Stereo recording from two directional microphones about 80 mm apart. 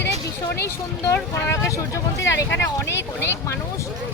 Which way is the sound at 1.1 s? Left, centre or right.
Left.